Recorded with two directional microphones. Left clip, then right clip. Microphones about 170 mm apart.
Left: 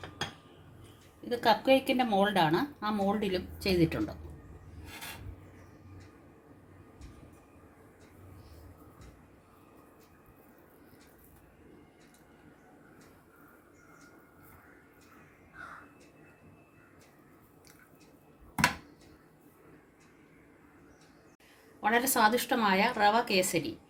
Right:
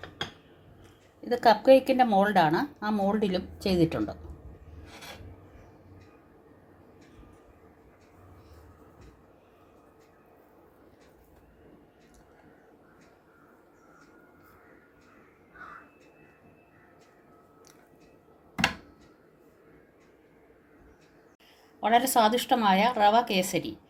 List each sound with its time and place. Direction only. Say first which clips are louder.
1.3 s a woman's voice: right 6 dB; 40° right (ahead or behind)
21.8 s a woman's voice: right 4 dB; 50° right (ahead or behind)